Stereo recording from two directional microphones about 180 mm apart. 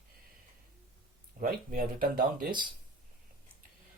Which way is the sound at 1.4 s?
50° right (ahead or behind).